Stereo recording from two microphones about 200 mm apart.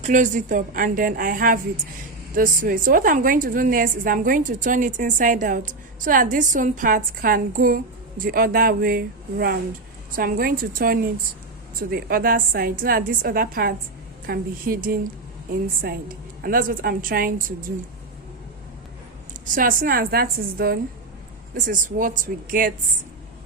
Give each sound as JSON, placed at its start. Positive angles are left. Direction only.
{"t": 0.0, "sound": "a woman's voice", "side_deg": -40}
{"t": 19.3, "sound": "a woman's voice", "side_deg": -45}